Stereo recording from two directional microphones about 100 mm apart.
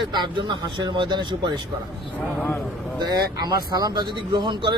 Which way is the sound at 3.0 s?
45° right (ahead or behind).